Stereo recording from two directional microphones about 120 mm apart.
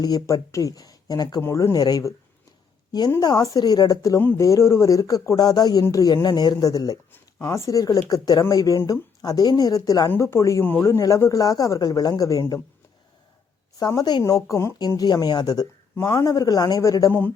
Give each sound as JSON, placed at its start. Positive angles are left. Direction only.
{"t": 0.0, "sound": "speech", "side_deg": 35}
{"t": 1.4, "sound": "speech", "side_deg": 20}
{"t": 3.2, "sound": "speech", "side_deg": 30}
{"t": 4.2, "sound": "speech", "side_deg": 15}
{"t": 7.1, "sound": "speech", "side_deg": 20}
{"t": 13.7, "sound": "speech", "side_deg": 30}
{"t": 16.0, "sound": "speech", "side_deg": 20}